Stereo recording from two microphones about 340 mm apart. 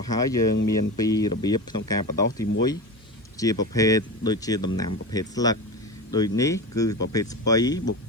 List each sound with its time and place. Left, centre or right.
0.1 s speech: centre